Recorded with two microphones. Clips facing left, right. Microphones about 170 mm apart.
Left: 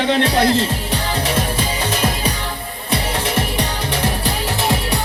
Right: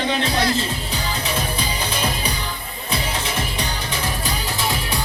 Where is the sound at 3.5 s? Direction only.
70° left (ahead or behind).